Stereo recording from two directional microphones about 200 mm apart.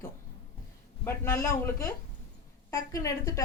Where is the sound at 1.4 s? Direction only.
15° left (ahead or behind).